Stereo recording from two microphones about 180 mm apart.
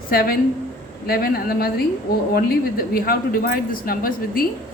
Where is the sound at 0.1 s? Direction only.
55° left (ahead or behind).